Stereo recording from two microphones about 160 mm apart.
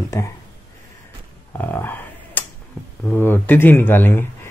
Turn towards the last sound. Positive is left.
turn(degrees=10)  # may be behind; listen again after turning